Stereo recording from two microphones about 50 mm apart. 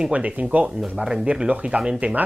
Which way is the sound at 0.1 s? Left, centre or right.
Right.